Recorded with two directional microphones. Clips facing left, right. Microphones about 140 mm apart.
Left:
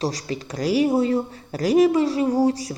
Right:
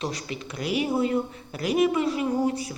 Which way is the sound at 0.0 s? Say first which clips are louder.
Left 5 dB; 35° left (ahead or behind).